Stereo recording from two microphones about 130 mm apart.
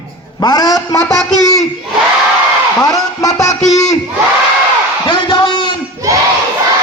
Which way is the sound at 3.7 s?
60° left (ahead or behind).